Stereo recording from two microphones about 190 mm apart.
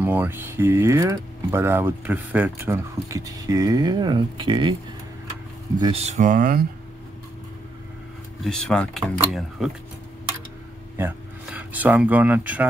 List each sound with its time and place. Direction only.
0.0 s speech: 10° right (ahead or behind); by 4.7 s 25° right (ahead or behind)
5.8 s speech: 30° right (ahead or behind); by 6.6 s 45° right (ahead or behind)
8.5 s speech: 5° left (ahead or behind)
11.0 s speech: 10° right (ahead or behind)